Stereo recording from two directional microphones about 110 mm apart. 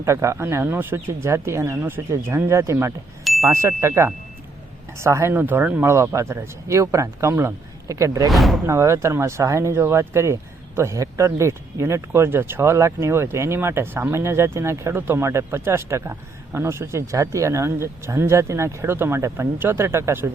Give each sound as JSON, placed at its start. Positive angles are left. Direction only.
{"t": 0.0, "sound": "speech", "side_deg": -25}
{"t": 8.3, "sound": "speech", "side_deg": 0}
{"t": 8.6, "sound": "speech", "side_deg": -25}